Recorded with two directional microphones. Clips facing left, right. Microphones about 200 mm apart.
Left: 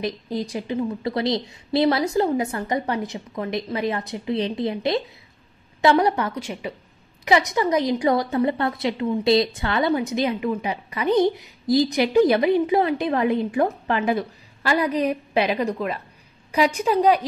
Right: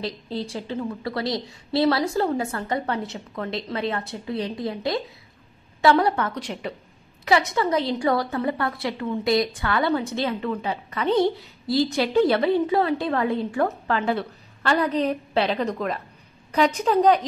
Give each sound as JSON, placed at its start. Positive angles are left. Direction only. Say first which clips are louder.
{"t": 0.0, "sound": "a woman's voice", "louder": "left 3 dB", "side_deg": 15}
{"t": 7.2, "sound": "a woman's voice", "louder": "left 1 dB", "side_deg": 15}